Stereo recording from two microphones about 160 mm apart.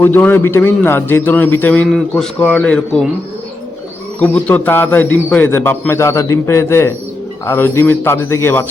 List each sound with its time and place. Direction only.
0.0 s a man's voice: 10° left (ahead or behind)
4.2 s a man's voice: 10° left (ahead or behind)